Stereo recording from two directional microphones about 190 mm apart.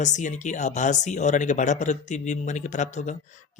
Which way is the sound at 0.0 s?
40° left (ahead or behind).